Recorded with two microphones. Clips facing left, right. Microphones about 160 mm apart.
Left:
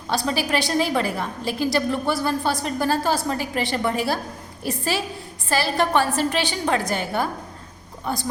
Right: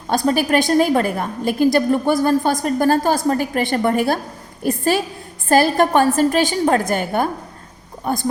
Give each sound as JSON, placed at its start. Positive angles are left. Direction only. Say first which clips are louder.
{"t": 0.1, "sound": "a woman's voice", "louder": "right 6 dB", "side_deg": -50}